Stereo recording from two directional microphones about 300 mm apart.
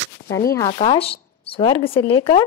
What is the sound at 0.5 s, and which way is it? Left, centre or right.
Speech, centre.